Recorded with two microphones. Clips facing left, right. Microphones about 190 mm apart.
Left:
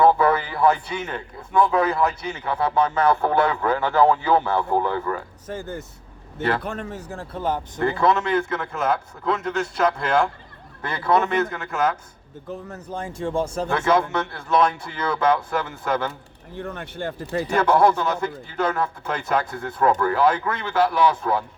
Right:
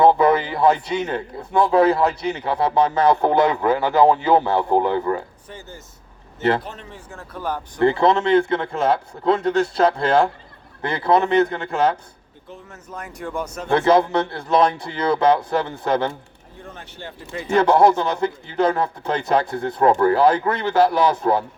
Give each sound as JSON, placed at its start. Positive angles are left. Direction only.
{"t": 0.0, "sound": "a sound", "side_deg": -20}
{"t": 1.0, "sound": "a man's voice", "side_deg": -35}
{"t": 3.1, "sound": "speech", "side_deg": -20}
{"t": 5.5, "sound": "speech", "side_deg": 50}
{"t": 7.1, "sound": "a man's voice", "side_deg": 30}
{"t": 7.8, "sound": "a man's voice", "side_deg": -30}
{"t": 12.5, "sound": "a man's voice", "side_deg": 35}
{"t": 13.7, "sound": "a man's voice", "side_deg": -35}
{"t": 16.6, "sound": "speech", "side_deg": 60}
{"t": 17.5, "sound": "a man's voice", "side_deg": -30}